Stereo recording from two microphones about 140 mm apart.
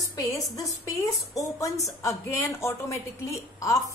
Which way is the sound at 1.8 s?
20° left (ahead or behind).